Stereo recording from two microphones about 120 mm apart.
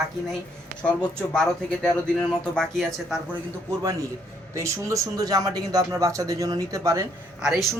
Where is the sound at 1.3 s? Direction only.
5° left (ahead or behind).